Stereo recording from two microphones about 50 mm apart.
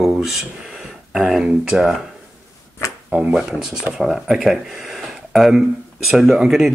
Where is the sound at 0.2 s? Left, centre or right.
Centre.